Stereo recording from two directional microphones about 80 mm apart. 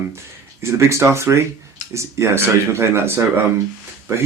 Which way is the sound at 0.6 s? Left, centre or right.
Right.